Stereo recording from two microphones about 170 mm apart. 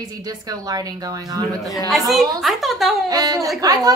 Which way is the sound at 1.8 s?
Centre (ahead or behind).